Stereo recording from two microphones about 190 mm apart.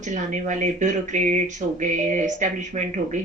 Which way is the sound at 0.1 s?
40° right (ahead or behind).